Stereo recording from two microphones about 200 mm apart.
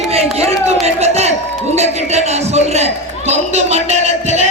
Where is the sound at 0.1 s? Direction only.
30° right (ahead or behind).